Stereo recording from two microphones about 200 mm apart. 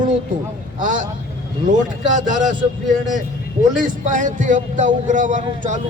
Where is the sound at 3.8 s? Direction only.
40° right (ahead or behind).